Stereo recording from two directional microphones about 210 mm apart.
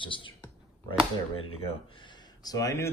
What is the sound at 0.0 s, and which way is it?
Speech, 25° left (ahead or behind).